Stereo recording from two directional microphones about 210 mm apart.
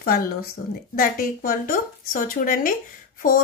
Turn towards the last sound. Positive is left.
turn(degrees=40)  # may be behind; listen again after turning